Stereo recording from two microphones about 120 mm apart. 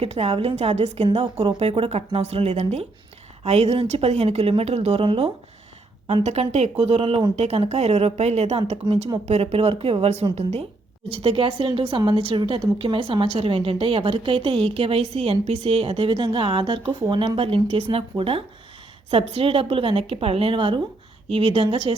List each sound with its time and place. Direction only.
0.0 s speech: 55° right (ahead or behind)
6.2 s a woman's voice: 65° right (ahead or behind); by 21.9 s 50° right (ahead or behind)